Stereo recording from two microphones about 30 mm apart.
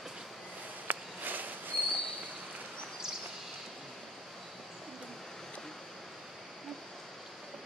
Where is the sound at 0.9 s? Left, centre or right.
Right.